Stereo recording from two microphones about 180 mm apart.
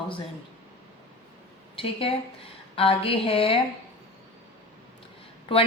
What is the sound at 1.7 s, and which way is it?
A woman's voice, 30° left (ahead or behind).